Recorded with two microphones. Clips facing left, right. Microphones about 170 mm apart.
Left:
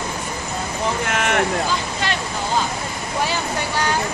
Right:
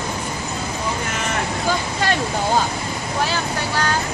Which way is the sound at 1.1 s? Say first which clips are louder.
Left 4 dB; 70° left (ahead or behind).